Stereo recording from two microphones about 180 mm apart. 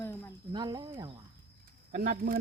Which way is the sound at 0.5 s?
25° right (ahead or behind).